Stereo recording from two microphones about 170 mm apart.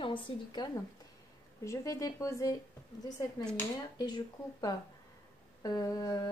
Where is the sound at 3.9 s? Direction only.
25° left (ahead or behind).